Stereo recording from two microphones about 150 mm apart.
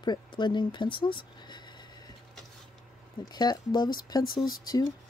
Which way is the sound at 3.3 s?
25° left (ahead or behind).